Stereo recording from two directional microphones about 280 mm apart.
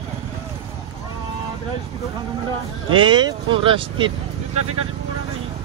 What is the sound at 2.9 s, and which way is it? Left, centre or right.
Speech, centre.